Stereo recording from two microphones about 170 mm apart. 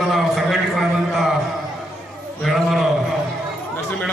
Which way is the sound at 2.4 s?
Centre (ahead or behind).